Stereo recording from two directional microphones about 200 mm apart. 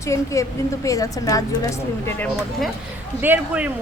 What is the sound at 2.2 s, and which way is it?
Speech, 5° left (ahead or behind).